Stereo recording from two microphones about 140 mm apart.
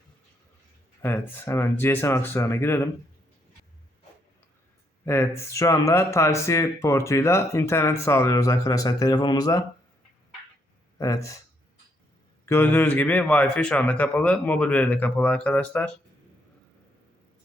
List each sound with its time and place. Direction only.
1.0 s speech: 15° left (ahead or behind)
5.0 s speech: 20° left (ahead or behind)
10.9 s speech: 20° left (ahead or behind)
12.5 s speech: 15° left (ahead or behind)